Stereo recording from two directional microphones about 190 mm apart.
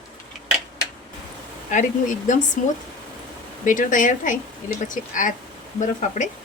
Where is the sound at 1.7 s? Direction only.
40° left (ahead or behind).